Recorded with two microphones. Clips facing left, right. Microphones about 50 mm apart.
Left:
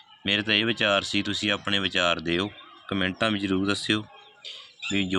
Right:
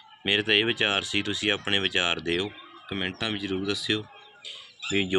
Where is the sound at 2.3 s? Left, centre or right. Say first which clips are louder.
Left 1 dB; centre.